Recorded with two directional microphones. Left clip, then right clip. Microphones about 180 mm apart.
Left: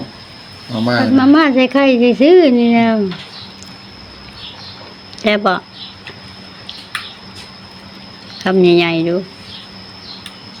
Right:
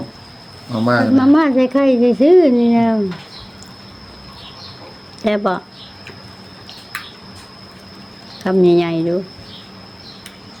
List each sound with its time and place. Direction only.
0.7 s speech: 15° right (ahead or behind)
1.1 s speech: centre (ahead or behind)
5.2 s speech: 5° right (ahead or behind)
8.4 s speech: 5° right (ahead or behind)